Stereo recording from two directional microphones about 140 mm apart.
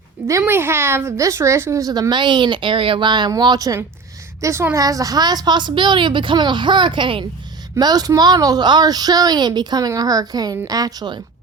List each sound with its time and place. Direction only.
0.3 s a woman's voice: 20° right (ahead or behind)